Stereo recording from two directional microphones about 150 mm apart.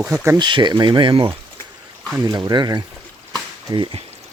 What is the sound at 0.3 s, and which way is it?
Speech, 30° right (ahead or behind).